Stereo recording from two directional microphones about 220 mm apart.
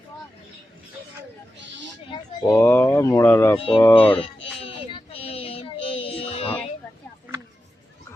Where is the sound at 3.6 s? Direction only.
25° left (ahead or behind).